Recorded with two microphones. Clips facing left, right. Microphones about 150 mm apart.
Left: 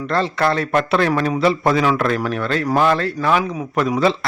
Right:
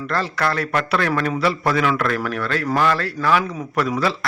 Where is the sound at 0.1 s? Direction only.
25° left (ahead or behind).